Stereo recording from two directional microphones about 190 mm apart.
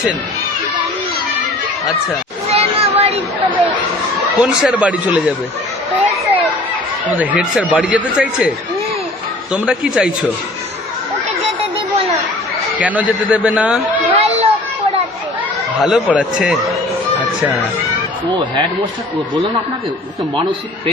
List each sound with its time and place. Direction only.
2.5 s a sound: 30° right (ahead or behind)
4.6 s speech: 5° right (ahead or behind)
7.1 s speech: 10° right (ahead or behind)
12.8 s speech: 5° right (ahead or behind)
14.1 s a sound: 30° right (ahead or behind)
15.8 s speech: centre (ahead or behind)
18.3 s speech: 25° right (ahead or behind)